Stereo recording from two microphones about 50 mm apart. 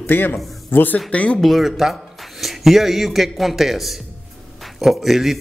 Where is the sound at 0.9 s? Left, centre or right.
Left.